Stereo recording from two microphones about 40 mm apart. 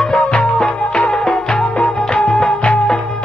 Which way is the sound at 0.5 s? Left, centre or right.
Left.